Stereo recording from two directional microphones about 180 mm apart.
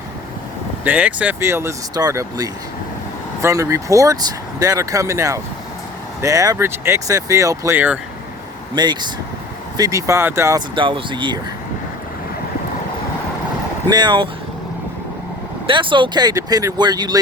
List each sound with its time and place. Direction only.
0.9 s speech: 10° right (ahead or behind)
8.7 s speech: 25° right (ahead or behind)
10.8 s speech: 25° right (ahead or behind)
13.9 s speech: 25° right (ahead or behind)
15.6 s speech: 30° right (ahead or behind)